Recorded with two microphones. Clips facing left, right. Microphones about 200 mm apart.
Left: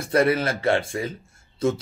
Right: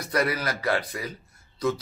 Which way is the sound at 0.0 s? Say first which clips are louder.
Left 6 dB; 30° left (ahead or behind).